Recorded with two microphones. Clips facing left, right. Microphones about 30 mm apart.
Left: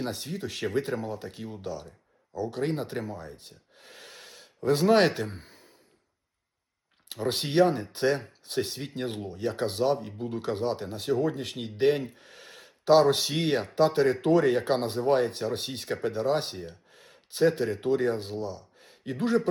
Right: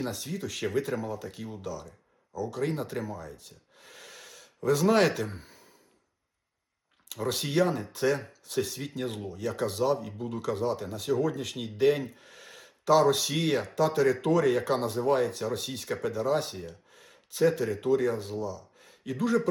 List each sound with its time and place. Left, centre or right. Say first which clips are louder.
0.0 s speech: left 1 dB; left
3.8 s gasp: even; left
7.1 s speech: left 1 dB; left
10.1 s speech: left 2 dB; centre
10.4 s speech: even; left
12.5 s speech: left 2 dB; left
17.3 s speech: left 1 dB; left
18.3 s speech: even; left
18.8 s a sound: even; left